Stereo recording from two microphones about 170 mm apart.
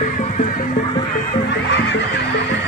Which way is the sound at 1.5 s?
90° left.